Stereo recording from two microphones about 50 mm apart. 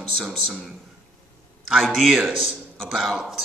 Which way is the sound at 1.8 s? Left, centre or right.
Centre.